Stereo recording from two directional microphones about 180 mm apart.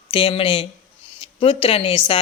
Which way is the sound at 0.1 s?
30° left (ahead or behind).